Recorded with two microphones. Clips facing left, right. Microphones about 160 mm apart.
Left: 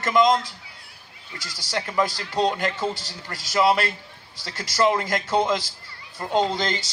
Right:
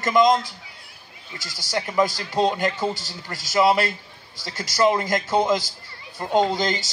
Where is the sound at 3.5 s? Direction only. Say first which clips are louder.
Right 2 dB; 20° right (ahead or behind).